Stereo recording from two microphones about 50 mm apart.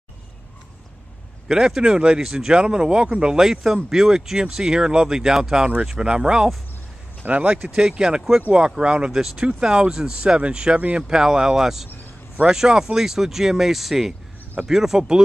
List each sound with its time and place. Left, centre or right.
1.5 s speech: centre
7.2 s speech: right
9.1 s speech: centre